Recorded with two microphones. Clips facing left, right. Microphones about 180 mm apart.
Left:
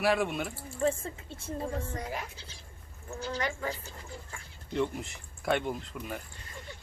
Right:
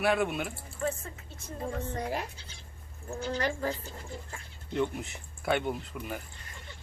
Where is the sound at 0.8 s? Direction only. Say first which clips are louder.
Left 4 dB; 30° left (ahead or behind).